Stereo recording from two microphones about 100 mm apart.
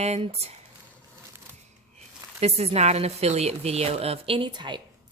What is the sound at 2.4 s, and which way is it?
A woman's voice, 90° right.